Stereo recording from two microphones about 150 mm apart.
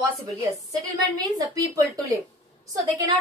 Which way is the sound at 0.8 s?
25° right (ahead or behind).